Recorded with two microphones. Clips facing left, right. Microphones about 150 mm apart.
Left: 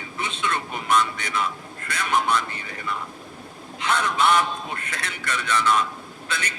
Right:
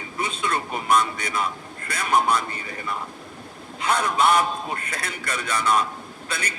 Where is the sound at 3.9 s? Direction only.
40° right (ahead or behind).